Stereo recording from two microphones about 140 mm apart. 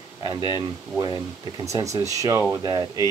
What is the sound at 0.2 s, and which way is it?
Speech, 30° right (ahead or behind).